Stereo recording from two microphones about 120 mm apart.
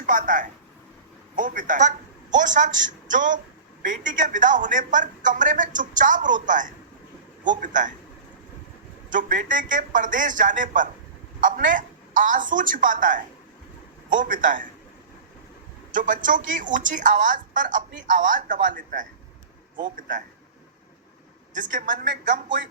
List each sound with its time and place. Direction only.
0.0 s a woman's voice: 90° right
9.1 s a woman's voice: 90° right
15.9 s a woman's voice: 90° right
21.6 s a woman's voice: 90° right